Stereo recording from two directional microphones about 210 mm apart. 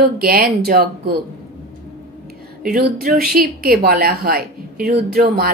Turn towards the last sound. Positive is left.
turn(degrees=-45)  # may be behind; listen again after turning